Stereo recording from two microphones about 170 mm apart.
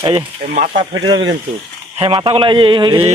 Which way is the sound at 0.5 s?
45° right (ahead or behind).